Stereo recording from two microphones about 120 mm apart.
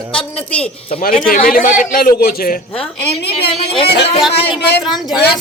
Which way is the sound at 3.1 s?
50° left (ahead or behind).